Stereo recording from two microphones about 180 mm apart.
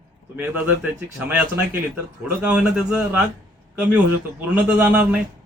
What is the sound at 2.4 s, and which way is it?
Speech, 5° right (ahead or behind).